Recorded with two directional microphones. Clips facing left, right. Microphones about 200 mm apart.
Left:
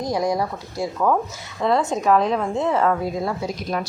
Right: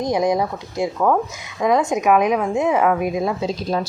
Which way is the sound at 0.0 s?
20° right (ahead or behind).